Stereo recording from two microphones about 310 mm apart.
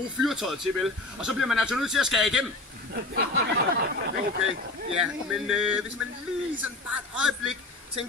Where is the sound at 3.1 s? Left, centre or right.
Right.